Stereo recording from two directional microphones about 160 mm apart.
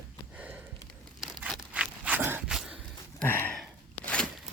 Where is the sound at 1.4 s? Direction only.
5° right (ahead or behind).